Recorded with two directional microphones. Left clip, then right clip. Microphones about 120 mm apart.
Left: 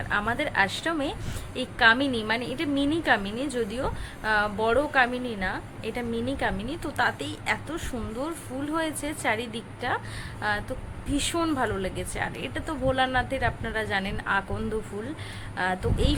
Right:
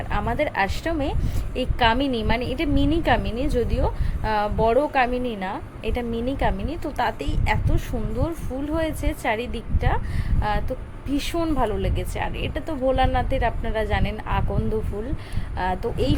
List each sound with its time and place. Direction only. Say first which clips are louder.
0.1 s a woman's voice: right 2 dB; 15° right (ahead or behind)
15.5 s a woman's voice: right 3 dB; 15° right (ahead or behind)